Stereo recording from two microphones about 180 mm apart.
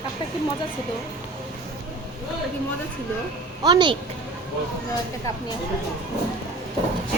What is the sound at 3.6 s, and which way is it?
Speech, 25° right (ahead or behind).